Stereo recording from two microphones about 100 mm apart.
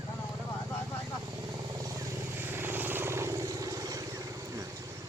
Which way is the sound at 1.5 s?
35° right (ahead or behind).